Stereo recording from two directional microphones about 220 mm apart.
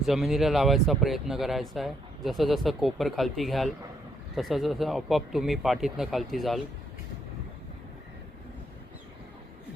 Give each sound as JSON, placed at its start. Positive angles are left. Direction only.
{"t": 0.0, "sound": "speech", "side_deg": 0}